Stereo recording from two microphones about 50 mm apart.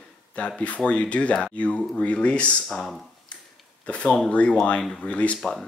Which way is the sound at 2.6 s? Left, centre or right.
Centre.